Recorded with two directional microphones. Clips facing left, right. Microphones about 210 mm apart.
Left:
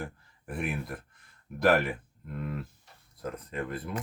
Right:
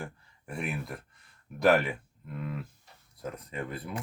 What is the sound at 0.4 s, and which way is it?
Speech, centre (ahead or behind).